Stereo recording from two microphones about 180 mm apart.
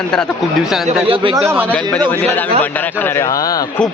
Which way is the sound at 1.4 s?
10° right (ahead or behind).